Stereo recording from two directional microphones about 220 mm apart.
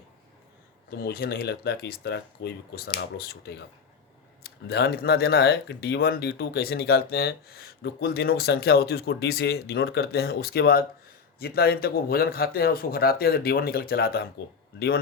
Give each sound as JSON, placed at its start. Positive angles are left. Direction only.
{"t": 0.9, "sound": "speech", "side_deg": 45}